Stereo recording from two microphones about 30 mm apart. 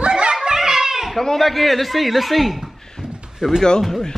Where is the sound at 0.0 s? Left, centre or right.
Right.